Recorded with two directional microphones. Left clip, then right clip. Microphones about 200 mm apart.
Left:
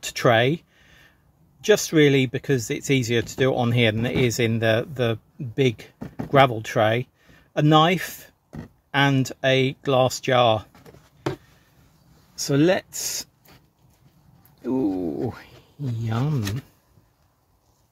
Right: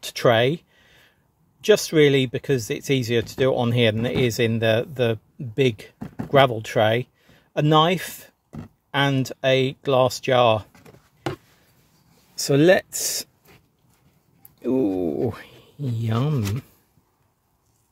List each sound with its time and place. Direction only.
0.0 s a sound: 15° right (ahead or behind)
1.6 s speech: 20° right (ahead or behind)
12.4 s speech: 40° right (ahead or behind)
14.6 s speech: 40° right (ahead or behind)
15.2 s a sound: 40° right (ahead or behind)
16.0 s speech: 40° right (ahead or behind)